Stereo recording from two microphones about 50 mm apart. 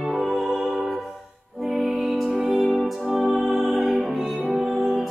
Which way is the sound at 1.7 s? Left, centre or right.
Centre.